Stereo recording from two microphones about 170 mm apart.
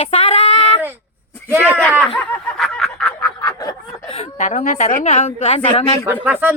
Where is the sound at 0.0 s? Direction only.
35° left (ahead or behind).